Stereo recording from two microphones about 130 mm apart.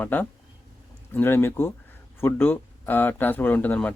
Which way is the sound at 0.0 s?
15° left (ahead or behind).